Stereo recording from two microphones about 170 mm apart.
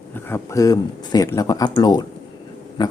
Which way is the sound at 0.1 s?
15° left (ahead or behind).